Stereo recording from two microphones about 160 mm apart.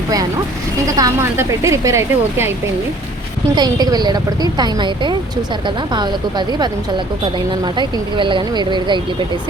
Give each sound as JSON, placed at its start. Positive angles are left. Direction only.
{"t": 0.9, "sound": "speech", "side_deg": -20}
{"t": 3.5, "sound": "speech", "side_deg": -25}